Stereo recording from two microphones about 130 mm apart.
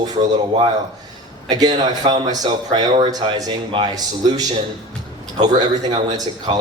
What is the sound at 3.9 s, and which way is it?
Speech, 30° right (ahead or behind).